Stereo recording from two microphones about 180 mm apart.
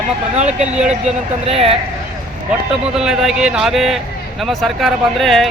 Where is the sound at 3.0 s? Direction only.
5° right (ahead or behind).